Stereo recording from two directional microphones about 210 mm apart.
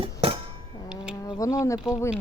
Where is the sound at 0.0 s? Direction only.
25° right (ahead or behind).